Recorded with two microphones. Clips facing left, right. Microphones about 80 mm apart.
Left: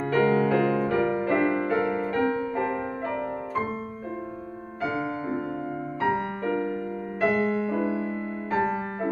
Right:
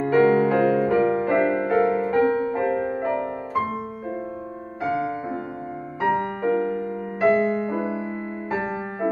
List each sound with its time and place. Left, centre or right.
0.0 s music: centre
4.8 s music: right
5.9 s music: centre